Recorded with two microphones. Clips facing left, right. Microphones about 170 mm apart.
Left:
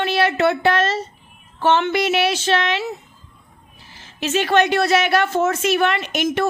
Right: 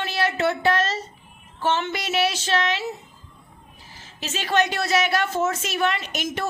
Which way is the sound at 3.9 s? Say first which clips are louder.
Left 11 dB; 60° left (ahead or behind).